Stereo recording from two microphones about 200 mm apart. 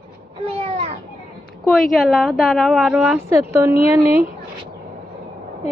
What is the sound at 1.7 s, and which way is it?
A woman's voice, centre (ahead or behind).